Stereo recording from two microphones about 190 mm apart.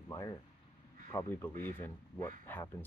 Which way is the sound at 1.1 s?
10° left (ahead or behind).